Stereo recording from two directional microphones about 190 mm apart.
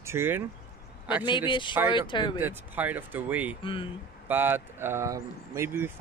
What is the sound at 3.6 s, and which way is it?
Speech, 30° left (ahead or behind).